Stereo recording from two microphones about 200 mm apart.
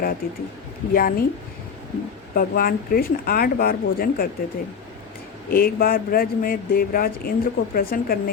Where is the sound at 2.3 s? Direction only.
45° left (ahead or behind).